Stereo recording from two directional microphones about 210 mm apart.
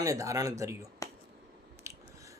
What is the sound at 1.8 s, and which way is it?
Biting, 15° right (ahead or behind).